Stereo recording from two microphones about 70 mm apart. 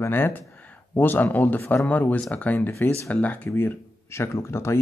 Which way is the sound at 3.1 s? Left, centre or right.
Left.